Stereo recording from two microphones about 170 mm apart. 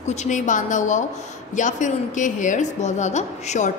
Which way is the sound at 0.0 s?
40° left (ahead or behind).